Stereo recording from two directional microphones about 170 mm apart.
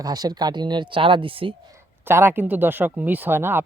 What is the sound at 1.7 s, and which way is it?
Speech, 15° right (ahead or behind).